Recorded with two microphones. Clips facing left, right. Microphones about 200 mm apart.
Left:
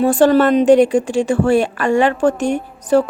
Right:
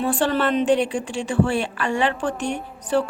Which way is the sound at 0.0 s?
45° left (ahead or behind).